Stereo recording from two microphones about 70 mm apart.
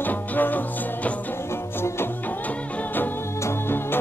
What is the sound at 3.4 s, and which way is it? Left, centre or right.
Music, left.